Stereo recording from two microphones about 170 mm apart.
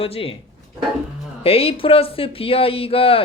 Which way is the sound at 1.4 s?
35° left (ahead or behind).